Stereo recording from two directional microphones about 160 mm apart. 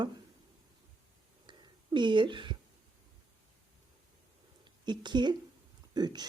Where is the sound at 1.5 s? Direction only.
30° right (ahead or behind).